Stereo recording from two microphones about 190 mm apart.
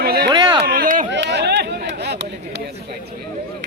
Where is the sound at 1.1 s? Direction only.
65° right (ahead or behind).